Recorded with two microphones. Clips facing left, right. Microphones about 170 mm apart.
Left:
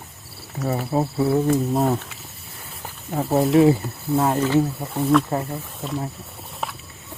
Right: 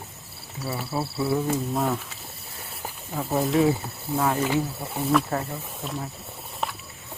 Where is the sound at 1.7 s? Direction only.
30° left (ahead or behind).